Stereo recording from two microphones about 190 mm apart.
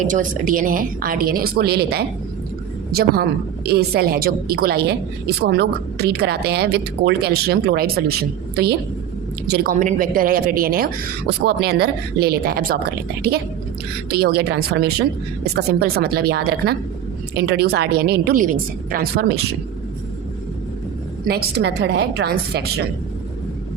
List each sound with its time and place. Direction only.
0.0 s a woman's voice: 45° right (ahead or behind)
21.2 s a woman's voice: 55° right (ahead or behind)